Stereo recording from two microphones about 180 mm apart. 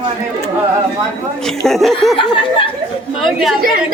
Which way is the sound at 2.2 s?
30° left (ahead or behind).